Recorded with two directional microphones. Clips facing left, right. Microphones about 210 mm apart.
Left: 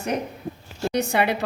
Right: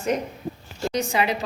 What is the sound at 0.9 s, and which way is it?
Speech, 60° left (ahead or behind).